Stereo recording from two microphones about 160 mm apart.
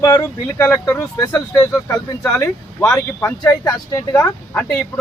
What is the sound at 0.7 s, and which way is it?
Speech, 15° left (ahead or behind).